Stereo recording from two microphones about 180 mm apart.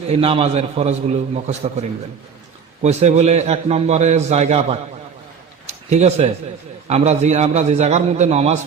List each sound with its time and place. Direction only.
0.1 s a man's voice: 30° right (ahead or behind)